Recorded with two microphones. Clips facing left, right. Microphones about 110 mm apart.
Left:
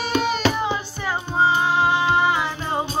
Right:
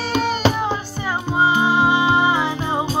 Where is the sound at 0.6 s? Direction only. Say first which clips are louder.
Right 2 dB; centre (ahead or behind).